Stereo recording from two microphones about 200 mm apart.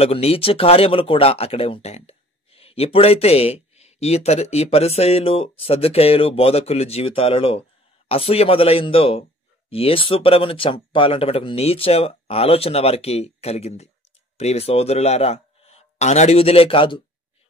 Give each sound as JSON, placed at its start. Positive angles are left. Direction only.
{"t": 0.0, "sound": "a man's voice", "side_deg": 30}